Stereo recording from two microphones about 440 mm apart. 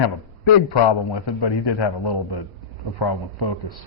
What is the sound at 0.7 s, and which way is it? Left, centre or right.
A man's voice, left.